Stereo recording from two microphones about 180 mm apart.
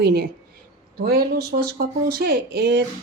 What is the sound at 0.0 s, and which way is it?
Speech, 60° right (ahead or behind).